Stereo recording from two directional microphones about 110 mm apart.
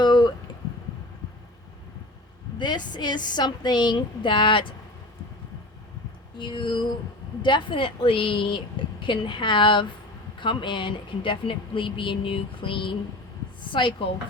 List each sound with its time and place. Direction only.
0.0 s a sound: 40° left (ahead or behind)
2.6 s a woman's voice: 40° left (ahead or behind)
6.4 s a woman's voice: 45° left (ahead or behind)